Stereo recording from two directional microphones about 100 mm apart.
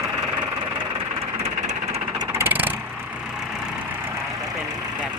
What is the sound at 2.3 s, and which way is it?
Vehicle, 20° right (ahead or behind).